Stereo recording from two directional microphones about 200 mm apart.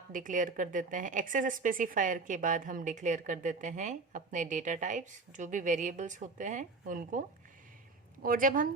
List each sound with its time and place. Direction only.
0.1 s a woman's voice: 40° right (ahead or behind)
8.2 s a woman's voice: 45° right (ahead or behind)